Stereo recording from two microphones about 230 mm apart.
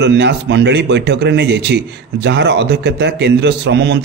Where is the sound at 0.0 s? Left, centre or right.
Right.